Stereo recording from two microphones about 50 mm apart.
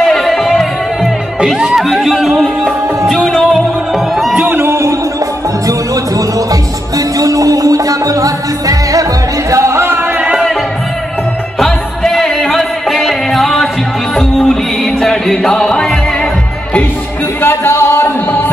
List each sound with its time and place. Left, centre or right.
0.0 s music: centre
1.4 s music: centre
1.8 s music: centre
3.3 s music: centre
4.5 s a sound: right
9.5 s music: right
10.3 s music: centre
11.6 s music: centre
17.4 s music: left